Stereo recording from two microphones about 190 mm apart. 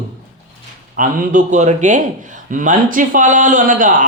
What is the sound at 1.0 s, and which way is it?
A man's voice, 40° right (ahead or behind).